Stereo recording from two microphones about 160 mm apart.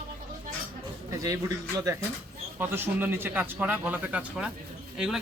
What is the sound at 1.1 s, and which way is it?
Speech, 20° right (ahead or behind).